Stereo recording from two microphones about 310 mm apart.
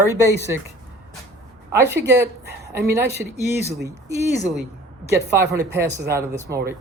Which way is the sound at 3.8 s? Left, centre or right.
Centre.